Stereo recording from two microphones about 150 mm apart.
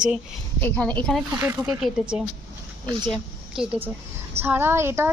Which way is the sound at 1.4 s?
10° right (ahead or behind).